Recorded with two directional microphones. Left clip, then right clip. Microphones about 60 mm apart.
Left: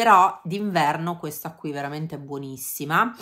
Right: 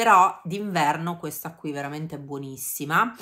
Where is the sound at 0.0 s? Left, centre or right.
Left.